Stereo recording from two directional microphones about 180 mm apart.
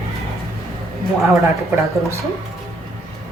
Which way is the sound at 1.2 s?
15° right (ahead or behind).